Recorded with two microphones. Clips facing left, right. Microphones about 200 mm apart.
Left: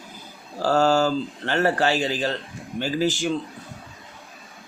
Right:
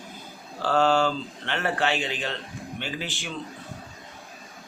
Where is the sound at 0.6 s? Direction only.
40° left (ahead or behind).